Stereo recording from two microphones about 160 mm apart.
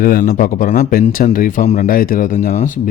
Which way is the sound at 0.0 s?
60° left (ahead or behind).